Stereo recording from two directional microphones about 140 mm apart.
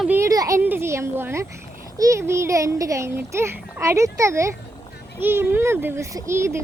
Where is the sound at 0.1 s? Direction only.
20° right (ahead or behind).